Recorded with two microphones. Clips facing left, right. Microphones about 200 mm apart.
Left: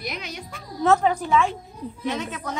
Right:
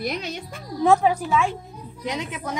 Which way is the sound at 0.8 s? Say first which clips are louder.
Right 1 dB; 5° right (ahead or behind).